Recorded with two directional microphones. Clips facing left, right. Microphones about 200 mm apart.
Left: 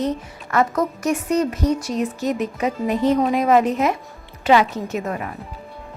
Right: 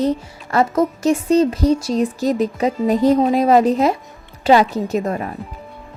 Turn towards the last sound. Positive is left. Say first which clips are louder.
# right 5 dB
turn(degrees=-35)  # may be behind; listen again after turning